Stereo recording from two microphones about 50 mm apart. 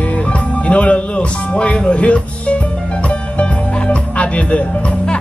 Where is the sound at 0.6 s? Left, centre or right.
Left.